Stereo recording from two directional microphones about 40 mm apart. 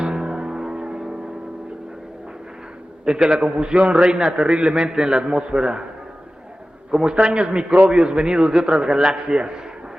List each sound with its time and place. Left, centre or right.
0.0 s music: centre
3.1 s a man's voice: centre
7.0 s a man's voice: right